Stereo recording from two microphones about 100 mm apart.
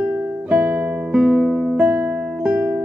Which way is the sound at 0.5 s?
20° right (ahead or behind).